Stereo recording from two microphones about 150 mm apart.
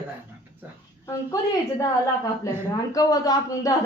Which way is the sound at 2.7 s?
25° left (ahead or behind).